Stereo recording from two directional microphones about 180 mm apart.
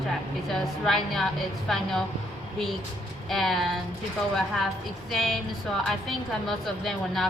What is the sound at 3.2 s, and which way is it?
A woman's voice, centre (ahead or behind).